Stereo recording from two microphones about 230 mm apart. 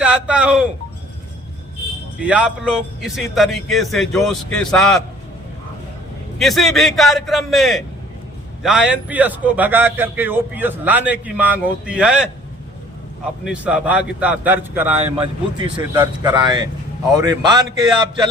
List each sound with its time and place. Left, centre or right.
0.0 s speech: centre
2.2 s a man's voice: centre
6.4 s a man's voice: centre
13.4 s a man's voice: centre
15.0 s speech: right